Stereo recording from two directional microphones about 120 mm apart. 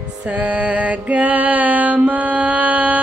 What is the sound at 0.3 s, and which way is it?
Music, 10° right (ahead or behind).